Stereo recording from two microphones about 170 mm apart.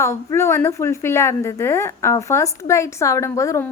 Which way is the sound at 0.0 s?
15° left (ahead or behind).